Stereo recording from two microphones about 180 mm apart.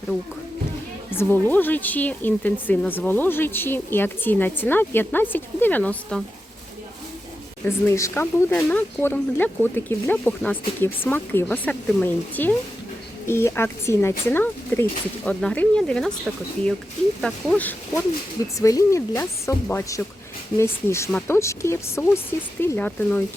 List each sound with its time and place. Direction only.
1.1 s speech: 10° left (ahead or behind)
7.6 s speech: 15° left (ahead or behind)